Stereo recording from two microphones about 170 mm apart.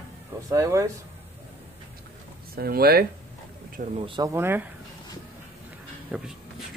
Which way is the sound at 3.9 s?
35° right (ahead or behind).